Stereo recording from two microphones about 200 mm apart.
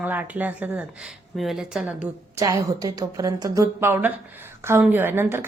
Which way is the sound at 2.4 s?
15° right (ahead or behind).